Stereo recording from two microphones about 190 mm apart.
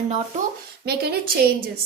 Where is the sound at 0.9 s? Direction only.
55° right (ahead or behind).